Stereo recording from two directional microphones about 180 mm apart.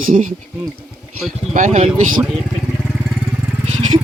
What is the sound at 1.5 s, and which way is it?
Speech, 40° right (ahead or behind).